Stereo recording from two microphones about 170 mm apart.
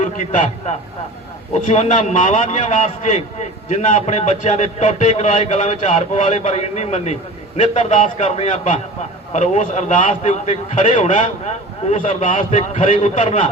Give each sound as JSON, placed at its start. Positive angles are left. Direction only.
{"t": 0.0, "sound": "a man's voice", "side_deg": 40}